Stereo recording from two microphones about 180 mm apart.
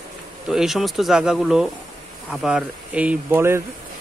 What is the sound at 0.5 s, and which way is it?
Speech, centre (ahead or behind).